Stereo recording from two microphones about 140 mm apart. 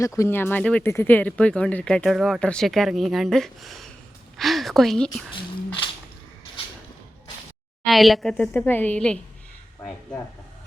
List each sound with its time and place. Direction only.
0.0 s speech: 20° left (ahead or behind); by 5.2 s 5° left (ahead or behind)
5.3 s a sound: 35° left (ahead or behind)
7.9 s speech: centre (ahead or behind)
8.5 s speech: 15° left (ahead or behind)